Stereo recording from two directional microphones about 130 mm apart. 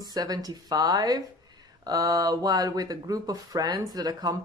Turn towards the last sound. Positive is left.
turn(degrees=-30)  # may be behind; listen again after turning